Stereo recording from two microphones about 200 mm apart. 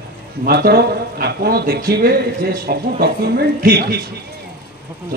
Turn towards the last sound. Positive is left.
turn(degrees=-50)  # may be behind; listen again after turning